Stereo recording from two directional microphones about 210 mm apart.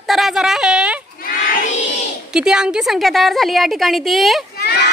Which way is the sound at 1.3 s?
35° left (ahead or behind).